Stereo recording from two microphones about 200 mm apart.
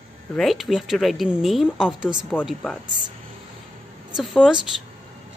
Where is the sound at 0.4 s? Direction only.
Centre (ahead or behind).